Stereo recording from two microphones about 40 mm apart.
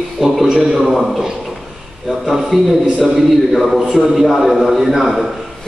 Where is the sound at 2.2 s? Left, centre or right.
Centre.